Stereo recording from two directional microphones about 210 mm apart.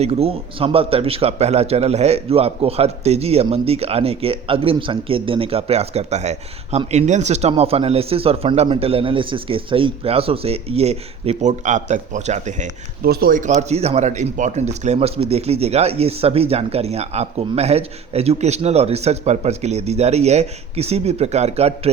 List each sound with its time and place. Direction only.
0.0 s a man's voice: 30° right (ahead or behind)
13.0 s a man's voice: 45° right (ahead or behind)